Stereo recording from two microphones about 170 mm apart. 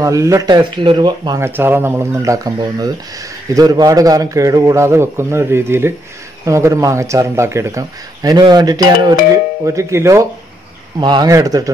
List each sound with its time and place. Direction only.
0.0 s speech: 20° right (ahead or behind)